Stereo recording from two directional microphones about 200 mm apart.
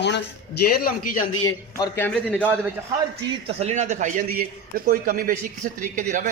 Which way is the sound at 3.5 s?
35° right (ahead or behind).